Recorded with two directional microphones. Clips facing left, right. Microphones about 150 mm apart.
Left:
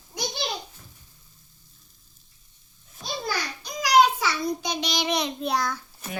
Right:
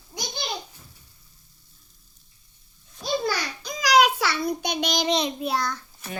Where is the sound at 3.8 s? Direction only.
90° right; by 5.0 s 45° right (ahead or behind).